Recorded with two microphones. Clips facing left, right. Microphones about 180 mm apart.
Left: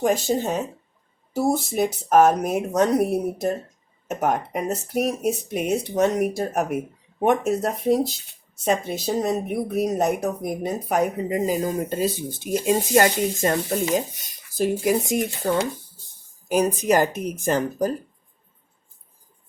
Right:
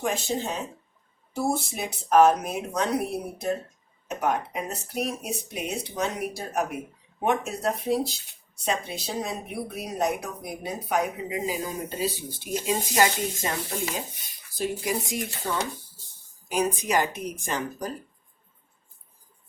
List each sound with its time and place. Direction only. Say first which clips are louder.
0.0 s speech: left 7 dB; 45° left (ahead or behind)
16.6 s speech: left 6 dB; 40° left (ahead or behind)